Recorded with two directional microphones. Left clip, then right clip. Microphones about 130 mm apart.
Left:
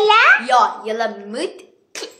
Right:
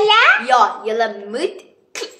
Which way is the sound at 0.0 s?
20° left (ahead or behind).